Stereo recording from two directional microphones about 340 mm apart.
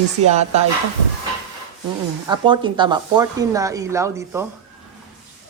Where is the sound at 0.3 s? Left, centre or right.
Centre.